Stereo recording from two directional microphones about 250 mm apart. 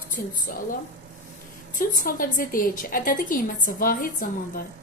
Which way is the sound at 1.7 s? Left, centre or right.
Left.